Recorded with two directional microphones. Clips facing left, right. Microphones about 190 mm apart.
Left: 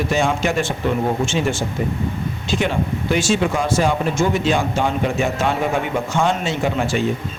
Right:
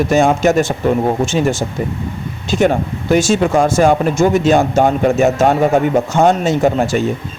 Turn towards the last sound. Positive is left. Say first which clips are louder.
# right 7 dB
turn(degrees=-40)  # may be behind; listen again after turning